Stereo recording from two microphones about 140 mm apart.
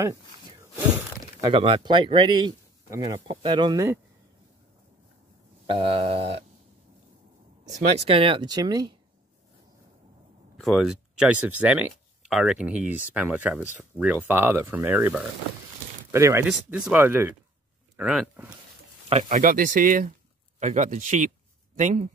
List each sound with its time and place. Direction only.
0.0 s a sound: 20° right (ahead or behind)
1.5 s speech: 35° right (ahead or behind)
5.7 s speech: 40° right (ahead or behind)
8.0 s speech: 40° right (ahead or behind)
10.6 s speech: centre (ahead or behind); by 16.4 s 20° right (ahead or behind)
16.4 s speech: 5° right (ahead or behind)
17.9 s speech: 5° right (ahead or behind)
19.0 s speech: 55° right (ahead or behind); by 20.1 s 70° right (ahead or behind)
20.5 s speech: 60° right (ahead or behind)